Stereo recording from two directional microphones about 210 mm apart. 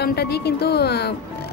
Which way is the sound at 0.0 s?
50° left (ahead or behind).